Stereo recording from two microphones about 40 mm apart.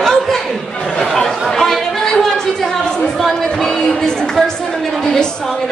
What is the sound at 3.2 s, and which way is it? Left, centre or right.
Music, centre.